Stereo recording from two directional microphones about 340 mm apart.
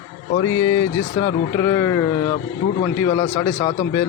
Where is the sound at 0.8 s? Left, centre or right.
Centre.